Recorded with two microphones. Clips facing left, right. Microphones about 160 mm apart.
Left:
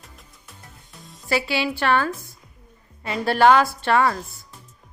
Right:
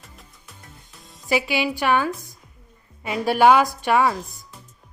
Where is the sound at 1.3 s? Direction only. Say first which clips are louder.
Right 1 dB; 15° right (ahead or behind).